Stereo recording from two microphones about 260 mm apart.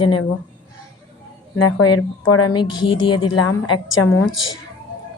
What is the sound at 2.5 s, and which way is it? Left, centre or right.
Speech, centre.